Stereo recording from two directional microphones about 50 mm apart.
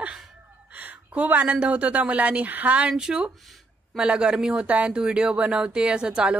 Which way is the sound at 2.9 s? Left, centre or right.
Centre.